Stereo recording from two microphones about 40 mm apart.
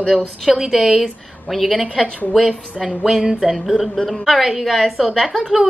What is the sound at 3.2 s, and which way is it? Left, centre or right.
Speech, right.